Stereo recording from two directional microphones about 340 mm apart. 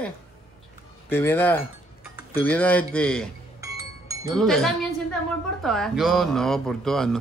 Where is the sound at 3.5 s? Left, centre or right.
Centre.